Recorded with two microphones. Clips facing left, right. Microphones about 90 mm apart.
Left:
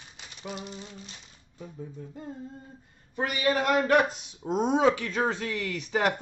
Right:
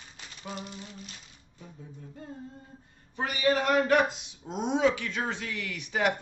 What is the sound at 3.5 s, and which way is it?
A man's voice, 45° left (ahead or behind).